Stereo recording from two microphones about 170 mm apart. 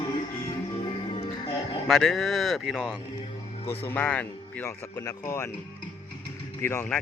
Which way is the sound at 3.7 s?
15° left (ahead or behind).